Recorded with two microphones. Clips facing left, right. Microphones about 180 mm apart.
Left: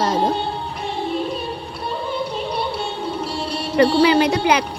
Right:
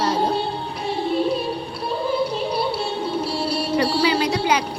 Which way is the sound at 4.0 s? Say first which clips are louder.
Left 5 dB; 60° left (ahead or behind).